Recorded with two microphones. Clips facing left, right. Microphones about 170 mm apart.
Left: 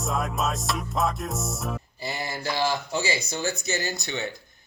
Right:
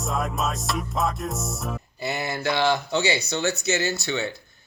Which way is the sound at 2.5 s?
65° right (ahead or behind).